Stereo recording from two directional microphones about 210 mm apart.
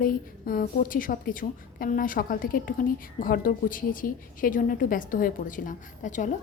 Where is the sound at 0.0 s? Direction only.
45° left (ahead or behind).